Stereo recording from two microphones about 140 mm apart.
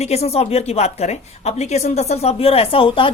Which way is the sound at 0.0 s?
50° left (ahead or behind).